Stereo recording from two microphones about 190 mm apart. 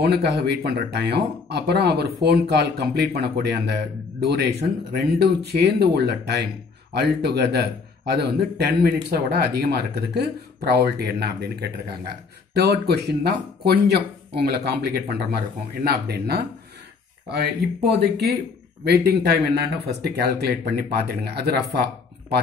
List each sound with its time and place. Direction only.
0.0 s speech: 60° right (ahead or behind)
17.9 s speech: 55° right (ahead or behind)